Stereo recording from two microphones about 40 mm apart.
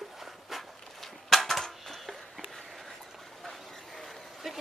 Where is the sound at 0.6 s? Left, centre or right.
Centre.